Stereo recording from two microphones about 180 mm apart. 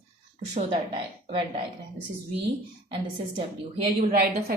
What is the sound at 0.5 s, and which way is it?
Speech, 35° right (ahead or behind).